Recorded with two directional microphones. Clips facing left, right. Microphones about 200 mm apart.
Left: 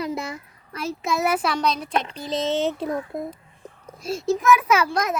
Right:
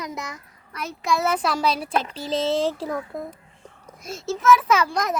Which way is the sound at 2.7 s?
20° left (ahead or behind).